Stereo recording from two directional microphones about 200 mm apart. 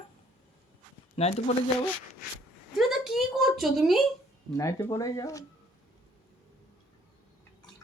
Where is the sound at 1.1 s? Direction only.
30° left (ahead or behind).